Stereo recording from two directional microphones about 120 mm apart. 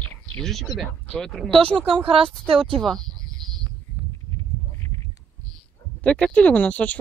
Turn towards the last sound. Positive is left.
turn(degrees=10)  # may be behind; listen again after turning